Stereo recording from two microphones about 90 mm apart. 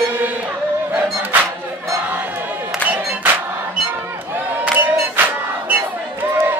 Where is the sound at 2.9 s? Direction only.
15° right (ahead or behind).